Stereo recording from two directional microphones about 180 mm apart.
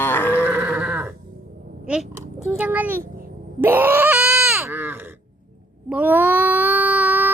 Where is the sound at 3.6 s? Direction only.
10° right (ahead or behind).